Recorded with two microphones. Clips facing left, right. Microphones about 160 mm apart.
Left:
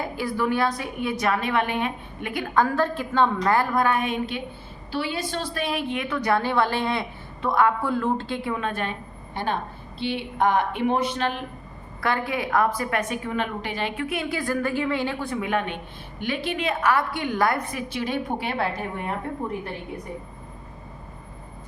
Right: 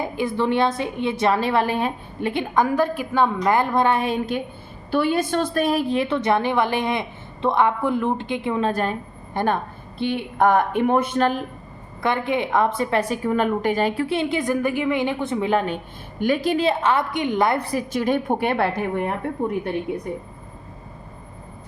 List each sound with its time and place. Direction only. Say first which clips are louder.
0.0 s a woman's voice: right 3 dB; 20° right (ahead or behind); by 4.4 s 40° right (ahead or behind)
4.9 s a woman's voice: right 8 dB; 50° right (ahead or behind); by 8.5 s 20° right (ahead or behind)
8.6 s a woman's voice: right 6 dB; 40° right (ahead or behind)
12.0 s a woman's voice: right 4 dB; 20° right (ahead or behind); by 18.7 s 55° right (ahead or behind)